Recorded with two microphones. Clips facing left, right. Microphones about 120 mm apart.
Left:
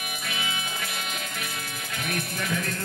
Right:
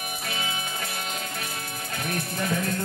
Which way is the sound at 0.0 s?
35° right (ahead or behind).